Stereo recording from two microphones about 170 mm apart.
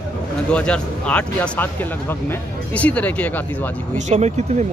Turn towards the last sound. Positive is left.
turn(degrees=-45)  # may be behind; listen again after turning